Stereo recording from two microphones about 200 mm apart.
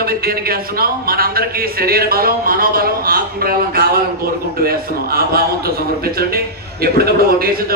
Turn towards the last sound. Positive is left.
turn(degrees=-50)  # may be behind; listen again after turning